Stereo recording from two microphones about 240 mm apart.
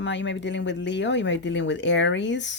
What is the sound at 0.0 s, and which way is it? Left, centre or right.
Speech, left.